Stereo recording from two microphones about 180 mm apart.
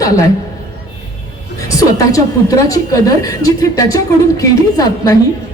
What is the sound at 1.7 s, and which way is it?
A woman's voice, 20° left (ahead or behind).